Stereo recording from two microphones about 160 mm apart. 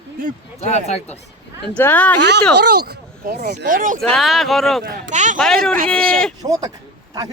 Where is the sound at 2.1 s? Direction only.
90° right; by 3.9 s 60° right (ahead or behind).